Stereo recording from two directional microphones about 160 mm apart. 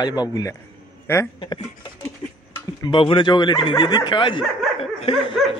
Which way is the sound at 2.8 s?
30° left (ahead or behind).